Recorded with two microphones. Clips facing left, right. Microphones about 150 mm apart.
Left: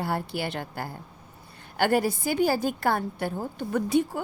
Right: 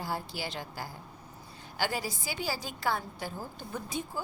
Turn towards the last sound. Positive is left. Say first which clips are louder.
# left 13 dB
turn(degrees=70)  # may be behind; listen again after turning